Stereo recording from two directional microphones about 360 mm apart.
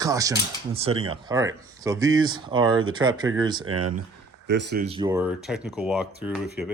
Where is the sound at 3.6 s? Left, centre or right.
Right.